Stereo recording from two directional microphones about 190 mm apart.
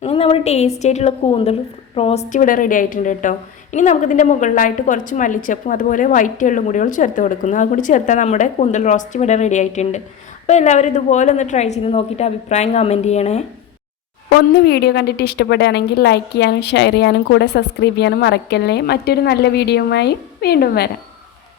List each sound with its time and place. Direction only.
0.0 s a woman's voice: 30° left (ahead or behind)
14.3 s a woman's voice: 60° left (ahead or behind)